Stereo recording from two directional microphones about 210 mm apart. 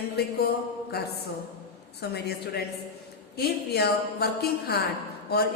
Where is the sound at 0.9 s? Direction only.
50° left (ahead or behind).